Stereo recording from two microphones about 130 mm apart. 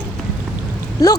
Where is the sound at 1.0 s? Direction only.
25° left (ahead or behind).